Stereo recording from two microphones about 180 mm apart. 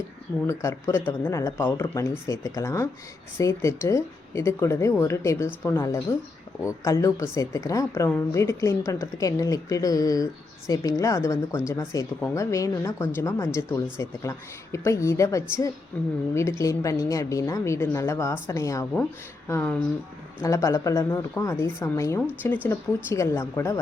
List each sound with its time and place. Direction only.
0.4 s speech: 15° left (ahead or behind)